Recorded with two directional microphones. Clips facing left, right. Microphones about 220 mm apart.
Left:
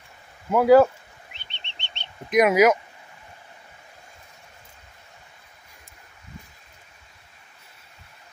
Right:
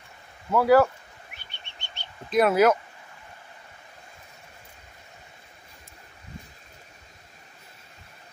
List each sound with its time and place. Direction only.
0.5 s speech: 20° left (ahead or behind)
1.3 s bird: 25° left (ahead or behind)